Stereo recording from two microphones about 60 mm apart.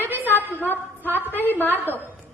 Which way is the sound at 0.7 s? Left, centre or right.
Left.